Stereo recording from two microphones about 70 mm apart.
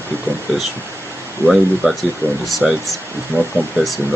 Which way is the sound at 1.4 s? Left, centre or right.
Centre.